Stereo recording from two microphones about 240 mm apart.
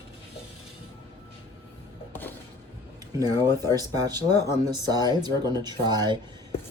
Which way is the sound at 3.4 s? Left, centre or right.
Centre.